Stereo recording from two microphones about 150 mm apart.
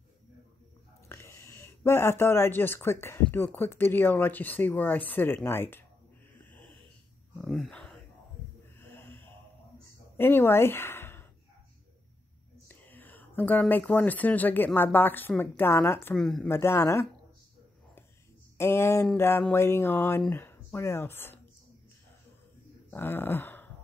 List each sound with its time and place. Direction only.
1.0 s speech: 20° left (ahead or behind)
7.3 s a sound: centre (ahead or behind)
8.7 s snort: 15° left (ahead or behind)
10.1 s speech: 15° left (ahead or behind)
12.6 s speech: 10° left (ahead or behind)
18.6 s speech: 15° left (ahead or behind)
22.8 s speech: 15° left (ahead or behind)